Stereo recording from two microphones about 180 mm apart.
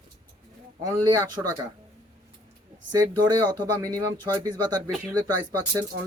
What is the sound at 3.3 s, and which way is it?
Speech, 20° right (ahead or behind).